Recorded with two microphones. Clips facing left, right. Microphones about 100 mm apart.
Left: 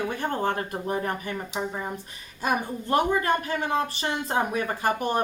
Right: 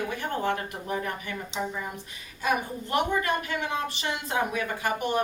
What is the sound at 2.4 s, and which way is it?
A woman's voice, 35° left (ahead or behind).